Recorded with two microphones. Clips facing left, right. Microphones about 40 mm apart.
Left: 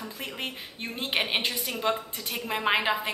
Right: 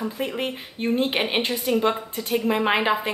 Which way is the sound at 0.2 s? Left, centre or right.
Centre.